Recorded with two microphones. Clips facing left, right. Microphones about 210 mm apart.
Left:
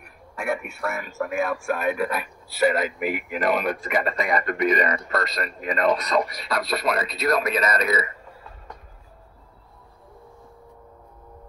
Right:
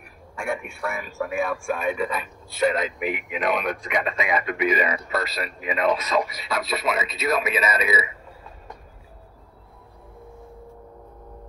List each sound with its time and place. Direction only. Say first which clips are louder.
0.4 s a man's voice: left 1 dB; 5° left (ahead or behind)